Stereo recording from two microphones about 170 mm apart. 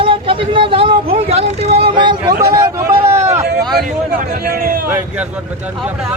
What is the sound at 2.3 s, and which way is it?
Speech, 65° right (ahead or behind).